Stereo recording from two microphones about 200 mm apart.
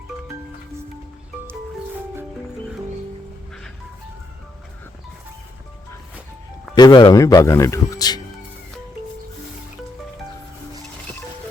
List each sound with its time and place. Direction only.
6.7 s speech: 20° left (ahead or behind)